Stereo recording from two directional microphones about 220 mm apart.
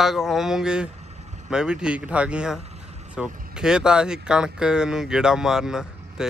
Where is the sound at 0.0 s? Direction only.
Centre (ahead or behind).